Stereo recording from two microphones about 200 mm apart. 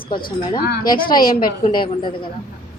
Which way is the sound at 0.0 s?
25° left (ahead or behind).